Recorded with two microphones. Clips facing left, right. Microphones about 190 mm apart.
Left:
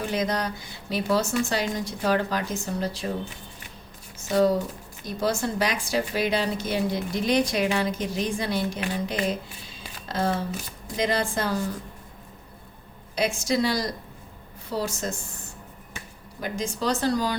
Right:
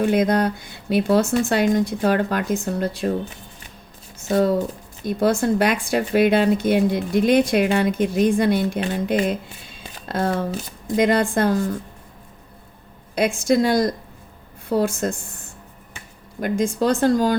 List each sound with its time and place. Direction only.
0.0 s speech: 55° right (ahead or behind)
5.0 s speech: 55° right (ahead or behind)
13.1 s speech: 55° right (ahead or behind)
16.4 s speech: 55° right (ahead or behind)